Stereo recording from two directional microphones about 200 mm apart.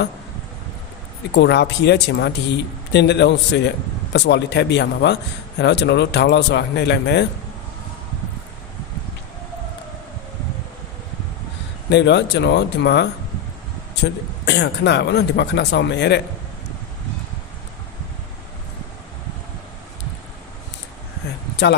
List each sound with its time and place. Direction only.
1.3 s speech: 60° left (ahead or behind)
11.9 s speech: 60° left (ahead or behind)